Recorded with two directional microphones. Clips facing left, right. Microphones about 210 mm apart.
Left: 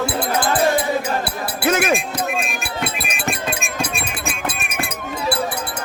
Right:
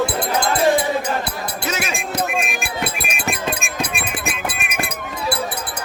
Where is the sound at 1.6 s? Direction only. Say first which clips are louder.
Left 9 dB; 55° left (ahead or behind).